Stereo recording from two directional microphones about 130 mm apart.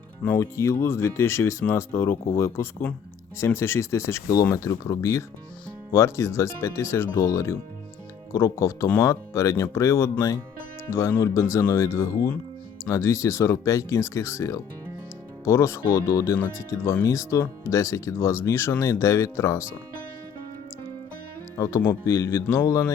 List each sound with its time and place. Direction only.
0.2 s speech: 15° left (ahead or behind)
21.8 s speech: 20° left (ahead or behind)